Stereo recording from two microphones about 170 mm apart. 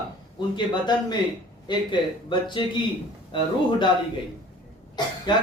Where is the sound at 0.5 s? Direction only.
25° left (ahead or behind).